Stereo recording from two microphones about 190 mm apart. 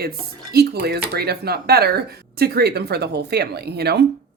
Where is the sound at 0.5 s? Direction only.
55° right (ahead or behind).